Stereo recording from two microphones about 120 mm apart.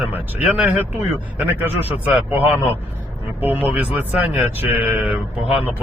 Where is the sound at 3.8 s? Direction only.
15° right (ahead or behind).